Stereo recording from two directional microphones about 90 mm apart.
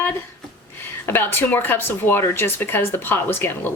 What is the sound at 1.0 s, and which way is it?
Speech, 25° left (ahead or behind).